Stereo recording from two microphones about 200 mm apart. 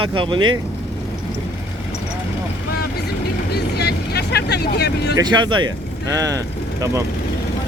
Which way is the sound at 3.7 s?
55° left (ahead or behind).